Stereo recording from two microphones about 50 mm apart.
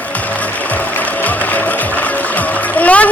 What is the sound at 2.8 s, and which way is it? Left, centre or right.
Splash, left.